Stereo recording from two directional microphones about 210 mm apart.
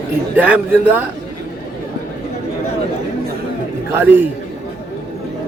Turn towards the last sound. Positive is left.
turn(degrees=-10)  # may be behind; listen again after turning